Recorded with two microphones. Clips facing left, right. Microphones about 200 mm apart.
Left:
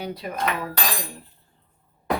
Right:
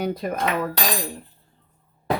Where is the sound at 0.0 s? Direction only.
50° right (ahead or behind).